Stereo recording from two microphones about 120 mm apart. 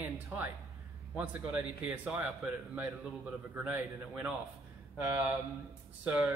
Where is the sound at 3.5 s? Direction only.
15° right (ahead or behind).